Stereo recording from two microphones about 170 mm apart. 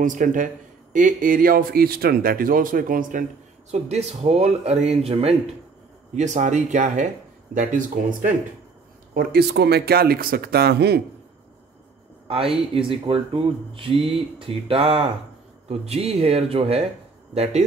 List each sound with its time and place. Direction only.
0.0 s speech: 50° right (ahead or behind)
3.7 s speech: 40° right (ahead or behind)
9.1 s speech: 65° right (ahead or behind)
12.7 s speech: 30° right (ahead or behind)